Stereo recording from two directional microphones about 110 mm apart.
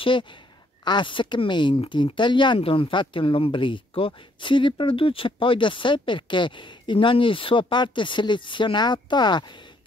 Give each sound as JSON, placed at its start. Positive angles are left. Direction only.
{"t": 0.0, "sound": "speech", "side_deg": 50}